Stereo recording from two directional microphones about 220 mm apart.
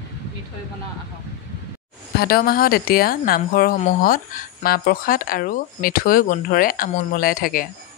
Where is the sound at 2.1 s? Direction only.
45° left (ahead or behind).